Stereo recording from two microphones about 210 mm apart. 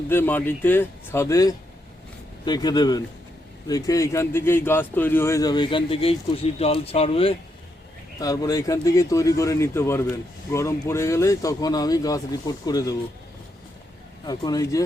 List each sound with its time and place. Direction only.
0.1 s a man's voice: 10° left (ahead or behind); by 7.3 s 25° left (ahead or behind)
8.2 s a man's voice: 15° left (ahead or behind)
14.3 s speech: 20° left (ahead or behind)